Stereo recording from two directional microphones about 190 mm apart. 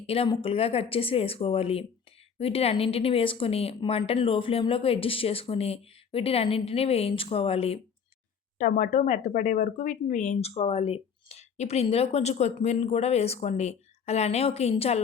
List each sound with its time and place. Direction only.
0.1 s speech: 30° left (ahead or behind)
8.5 s speech: 40° left (ahead or behind)